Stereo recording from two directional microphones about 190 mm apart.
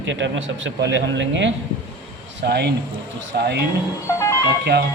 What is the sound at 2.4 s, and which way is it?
Speech, 60° right (ahead or behind).